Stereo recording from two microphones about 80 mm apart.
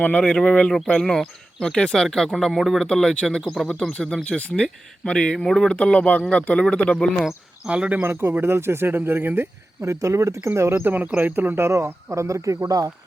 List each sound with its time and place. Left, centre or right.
0.0 s speech: centre
0.7 s speech: centre
7.6 s speech: centre
8.0 s speech: right
9.8 s a man's voice: right
10.8 s a man's voice: right